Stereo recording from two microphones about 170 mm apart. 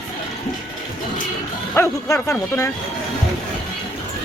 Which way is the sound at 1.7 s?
15° left (ahead or behind).